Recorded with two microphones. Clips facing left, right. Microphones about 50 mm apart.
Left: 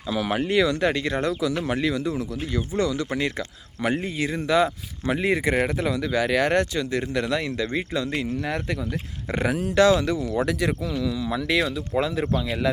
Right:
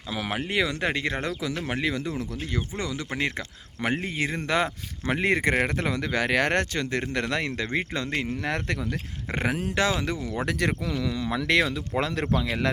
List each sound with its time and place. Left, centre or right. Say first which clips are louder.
0.1 s speech: left 5 dB; centre
2.0 s speech: left 4 dB; right
2.6 s speech: left 8 dB; right
9.3 s speech: left 4 dB; right
10.6 s speech: left 2 dB; right